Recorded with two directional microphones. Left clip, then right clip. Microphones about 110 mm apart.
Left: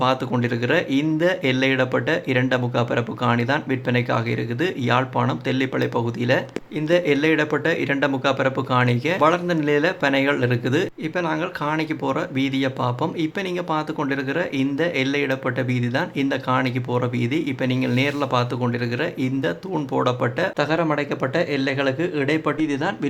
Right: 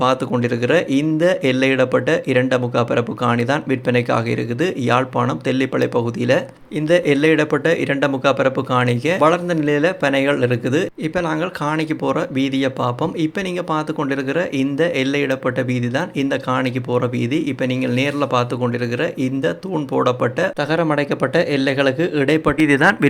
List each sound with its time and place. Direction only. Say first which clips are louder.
0.0 s speech: right 4 dB; 25° right (ahead or behind)
20.6 s speech: right 2 dB; 35° right (ahead or behind)
22.6 s speech: right 10 dB; 50° right (ahead or behind)